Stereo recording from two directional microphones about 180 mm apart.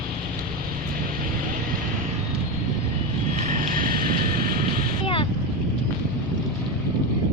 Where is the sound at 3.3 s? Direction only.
45° right (ahead or behind).